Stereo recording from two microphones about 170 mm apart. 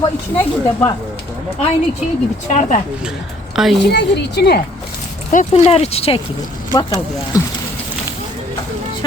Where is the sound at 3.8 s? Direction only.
80° left.